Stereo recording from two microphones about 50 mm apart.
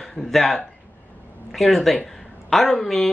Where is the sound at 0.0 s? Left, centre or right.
Centre.